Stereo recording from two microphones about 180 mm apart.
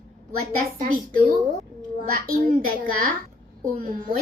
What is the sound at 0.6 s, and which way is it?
Speech, 50° right (ahead or behind).